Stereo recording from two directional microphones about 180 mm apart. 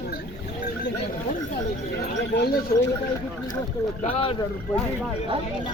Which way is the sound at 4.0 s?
35° left (ahead or behind).